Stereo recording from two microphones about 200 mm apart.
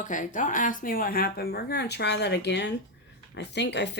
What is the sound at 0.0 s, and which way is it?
Speech, 40° left (ahead or behind).